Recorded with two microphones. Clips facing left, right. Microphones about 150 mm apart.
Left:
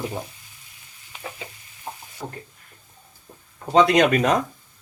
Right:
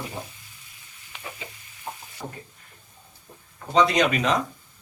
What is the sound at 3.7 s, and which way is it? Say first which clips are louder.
Speech: left 4 dB; 50° left (ahead or behind).